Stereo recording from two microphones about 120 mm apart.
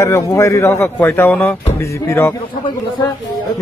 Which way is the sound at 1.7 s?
25° left (ahead or behind).